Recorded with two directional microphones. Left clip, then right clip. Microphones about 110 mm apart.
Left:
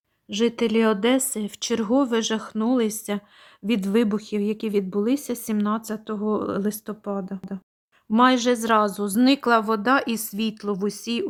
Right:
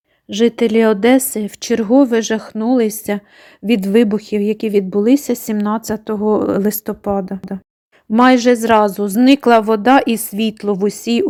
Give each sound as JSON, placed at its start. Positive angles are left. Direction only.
{"t": 0.3, "sound": "speech", "side_deg": -30}